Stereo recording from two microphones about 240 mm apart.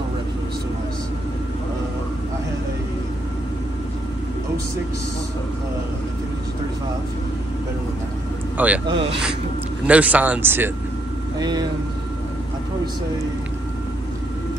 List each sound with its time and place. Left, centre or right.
8.5 s speech: centre
9.8 s speech: centre